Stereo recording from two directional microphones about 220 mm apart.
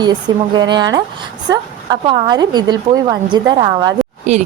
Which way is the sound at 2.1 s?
20° right (ahead or behind).